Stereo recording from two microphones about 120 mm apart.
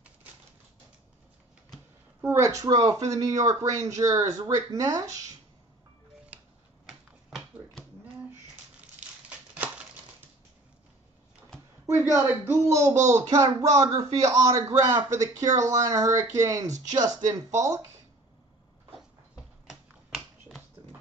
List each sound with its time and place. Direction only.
2.2 s a man's voice: 25° right (ahead or behind)
6.3 s a sound: 10° right (ahead or behind)
12.1 s a man's voice: 20° right (ahead or behind)
19.7 s finger snapping: centre (ahead or behind)